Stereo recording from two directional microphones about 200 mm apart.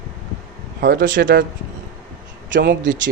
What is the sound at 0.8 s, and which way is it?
Speech, 55° right (ahead or behind).